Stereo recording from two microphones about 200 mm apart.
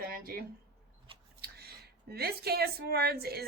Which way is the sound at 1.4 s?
50° right (ahead or behind).